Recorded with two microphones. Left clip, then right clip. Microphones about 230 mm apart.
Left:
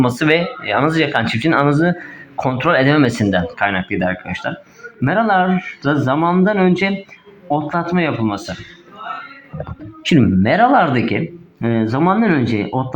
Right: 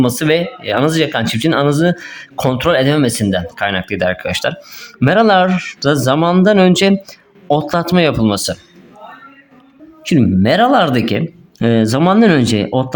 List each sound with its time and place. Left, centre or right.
0.2 s speech: right
10.0 s speech: right
10.4 s speech: right